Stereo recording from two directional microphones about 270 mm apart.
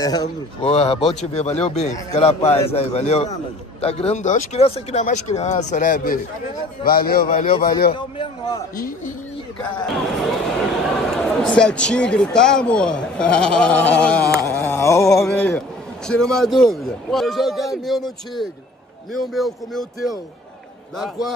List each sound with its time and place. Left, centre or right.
0.0 s a man's voice: centre; by 7.4 s left
7.9 s a sound: centre
8.7 s a man's voice: left
9.9 s a man's voice: centre
14.3 s a sound: centre
15.0 s a man's voice: centre